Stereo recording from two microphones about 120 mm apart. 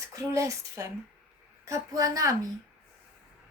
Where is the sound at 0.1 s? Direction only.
25° right (ahead or behind).